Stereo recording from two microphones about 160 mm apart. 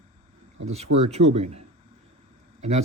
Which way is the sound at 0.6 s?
40° right (ahead or behind).